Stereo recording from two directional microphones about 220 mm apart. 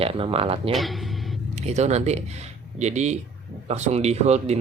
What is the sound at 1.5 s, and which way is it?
Speech, 30° right (ahead or behind).